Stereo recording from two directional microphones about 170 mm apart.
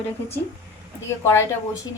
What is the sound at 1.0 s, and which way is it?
Speech, 15° left (ahead or behind).